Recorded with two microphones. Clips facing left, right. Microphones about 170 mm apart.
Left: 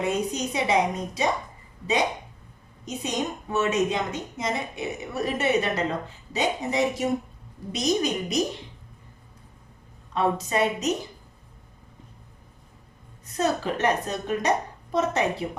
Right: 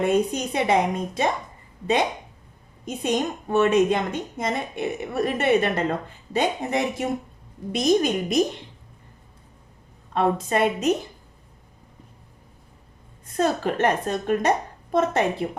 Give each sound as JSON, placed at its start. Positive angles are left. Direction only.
{"t": 0.1, "sound": "a woman's voice", "side_deg": -55}
{"t": 2.8, "sound": "a woman's voice", "side_deg": -55}
{"t": 10.2, "sound": "a woman's voice", "side_deg": -55}
{"t": 13.2, "sound": "a woman's voice", "side_deg": -50}